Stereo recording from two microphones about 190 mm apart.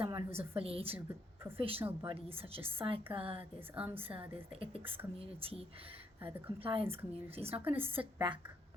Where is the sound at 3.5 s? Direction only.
10° right (ahead or behind).